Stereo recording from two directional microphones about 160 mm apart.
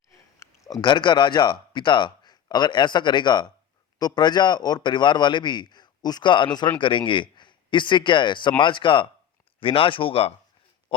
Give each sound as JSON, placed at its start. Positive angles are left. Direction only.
{"t": 0.3, "sound": "a man's voice", "side_deg": 20}